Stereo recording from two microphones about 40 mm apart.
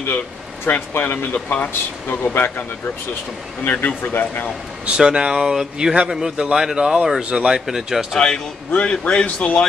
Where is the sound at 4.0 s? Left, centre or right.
Left.